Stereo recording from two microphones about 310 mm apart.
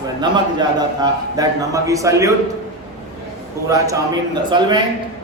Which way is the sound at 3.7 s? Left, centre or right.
Centre.